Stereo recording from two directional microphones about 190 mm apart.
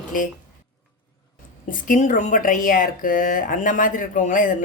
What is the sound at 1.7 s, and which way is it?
Speech, 45° left (ahead or behind).